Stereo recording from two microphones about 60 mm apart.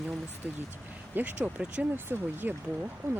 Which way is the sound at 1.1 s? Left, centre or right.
Right.